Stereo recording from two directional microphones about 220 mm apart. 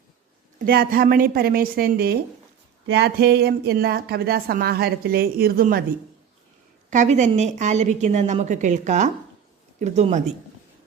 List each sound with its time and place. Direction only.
0.6 s speech: 45° right (ahead or behind)
6.9 s a woman's voice: 30° right (ahead or behind)